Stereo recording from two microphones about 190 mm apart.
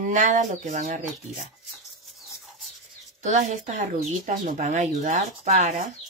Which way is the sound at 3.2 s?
40° right (ahead or behind).